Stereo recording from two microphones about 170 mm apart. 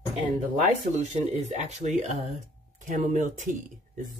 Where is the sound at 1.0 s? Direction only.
45° right (ahead or behind).